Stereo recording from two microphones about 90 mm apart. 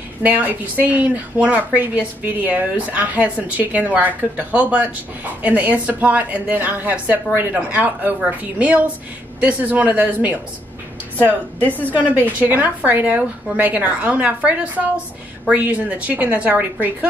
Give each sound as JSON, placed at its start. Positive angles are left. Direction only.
{"t": 0.2, "sound": "a woman's voice", "side_deg": -20}
{"t": 11.6, "sound": "a woman's voice", "side_deg": 20}
{"t": 12.0, "sound": "a woman's voice", "side_deg": -20}